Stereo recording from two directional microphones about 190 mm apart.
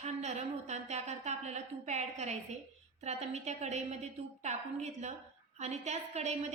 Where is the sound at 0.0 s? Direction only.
35° right (ahead or behind).